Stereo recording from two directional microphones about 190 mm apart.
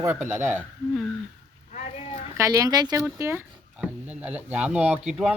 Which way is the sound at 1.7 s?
30° left (ahead or behind).